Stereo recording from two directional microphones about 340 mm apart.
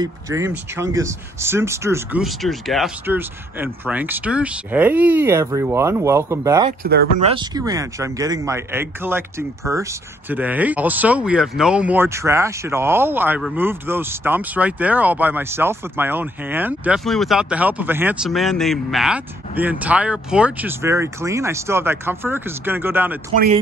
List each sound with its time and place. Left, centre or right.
0.0 s speech: centre
23.3 s speech: right